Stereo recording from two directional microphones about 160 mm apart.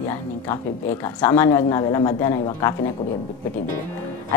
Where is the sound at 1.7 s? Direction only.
25° left (ahead or behind).